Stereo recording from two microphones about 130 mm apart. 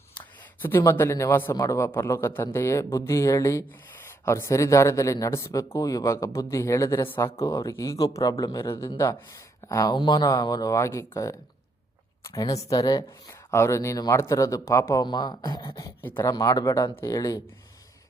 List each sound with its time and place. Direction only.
0.8 s a man's voice: 20° left (ahead or behind)
15.0 s speech: 35° left (ahead or behind)
16.0 s speech: 20° left (ahead or behind)
16.3 s a man's voice: 30° left (ahead or behind)